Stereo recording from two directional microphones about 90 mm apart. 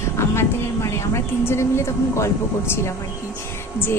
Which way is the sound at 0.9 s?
30° left (ahead or behind).